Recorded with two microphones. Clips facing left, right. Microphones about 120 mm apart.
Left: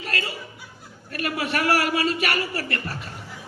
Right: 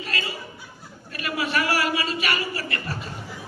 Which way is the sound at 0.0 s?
60° left (ahead or behind).